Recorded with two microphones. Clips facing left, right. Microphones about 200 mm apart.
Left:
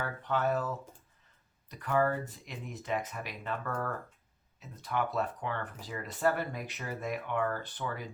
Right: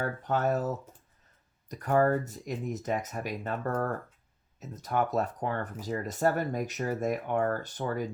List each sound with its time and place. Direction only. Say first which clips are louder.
0.0 s speech: right 3 dB; 45° right (ahead or behind)